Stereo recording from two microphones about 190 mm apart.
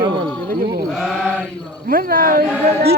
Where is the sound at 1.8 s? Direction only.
50° right (ahead or behind).